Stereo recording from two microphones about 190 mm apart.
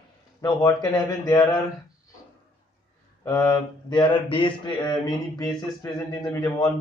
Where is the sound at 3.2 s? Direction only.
15° left (ahead or behind).